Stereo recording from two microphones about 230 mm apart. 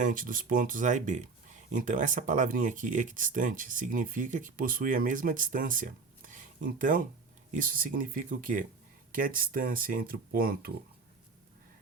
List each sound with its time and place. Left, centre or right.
0.0 s speech: right